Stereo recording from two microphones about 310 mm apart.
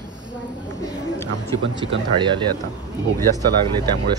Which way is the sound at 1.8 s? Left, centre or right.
Centre.